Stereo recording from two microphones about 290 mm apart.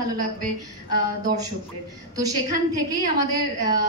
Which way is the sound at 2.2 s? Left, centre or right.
Centre.